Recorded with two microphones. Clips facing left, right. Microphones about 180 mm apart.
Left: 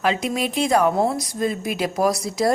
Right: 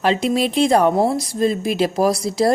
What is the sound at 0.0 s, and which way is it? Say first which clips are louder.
A woman's voice: right 4 dB; 35° right (ahead or behind).